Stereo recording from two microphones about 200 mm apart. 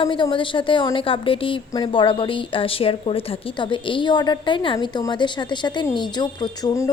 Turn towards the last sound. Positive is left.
turn(degrees=15)  # may be behind; listen again after turning